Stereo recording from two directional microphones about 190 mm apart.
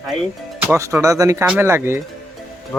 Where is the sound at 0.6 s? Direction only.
15° right (ahead or behind).